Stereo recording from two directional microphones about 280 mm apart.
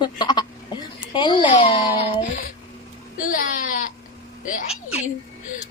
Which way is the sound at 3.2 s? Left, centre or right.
Left.